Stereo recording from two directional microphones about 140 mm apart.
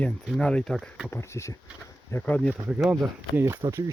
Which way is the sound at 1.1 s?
20° left (ahead or behind).